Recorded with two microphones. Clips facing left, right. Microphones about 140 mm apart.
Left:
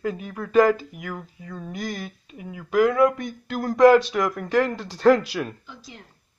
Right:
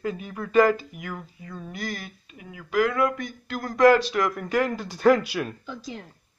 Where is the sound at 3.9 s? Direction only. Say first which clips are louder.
Left 2 dB; centre (ahead or behind).